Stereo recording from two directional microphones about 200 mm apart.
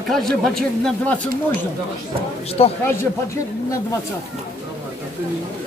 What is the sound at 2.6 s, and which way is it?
Speech, 30° left (ahead or behind).